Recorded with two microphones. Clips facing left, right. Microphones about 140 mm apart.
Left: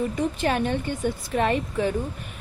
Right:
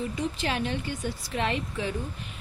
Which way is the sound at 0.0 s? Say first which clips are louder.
Left 6 dB; 50° left (ahead or behind).